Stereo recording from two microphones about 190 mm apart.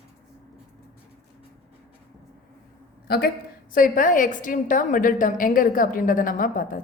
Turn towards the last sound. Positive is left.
turn(degrees=45)  # may be behind; listen again after turning